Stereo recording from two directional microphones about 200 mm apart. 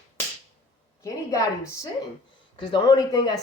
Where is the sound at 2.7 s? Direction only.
20° left (ahead or behind).